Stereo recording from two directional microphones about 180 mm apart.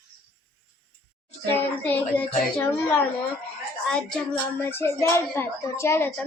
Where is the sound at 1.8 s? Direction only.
10° left (ahead or behind).